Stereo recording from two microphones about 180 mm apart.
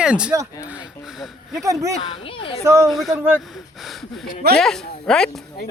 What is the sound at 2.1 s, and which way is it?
Speech, 30° left (ahead or behind).